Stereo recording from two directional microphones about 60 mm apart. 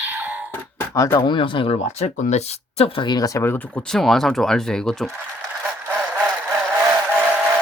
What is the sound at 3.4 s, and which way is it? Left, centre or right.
Speech, left.